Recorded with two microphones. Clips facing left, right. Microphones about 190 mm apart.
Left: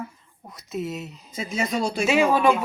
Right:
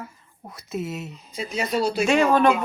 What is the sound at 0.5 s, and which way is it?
Speech, centre (ahead or behind).